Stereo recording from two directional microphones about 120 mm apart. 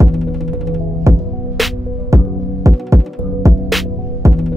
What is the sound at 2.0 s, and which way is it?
Music, 25° right (ahead or behind).